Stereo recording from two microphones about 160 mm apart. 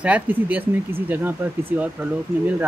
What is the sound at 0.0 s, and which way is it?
Speech, 10° right (ahead or behind).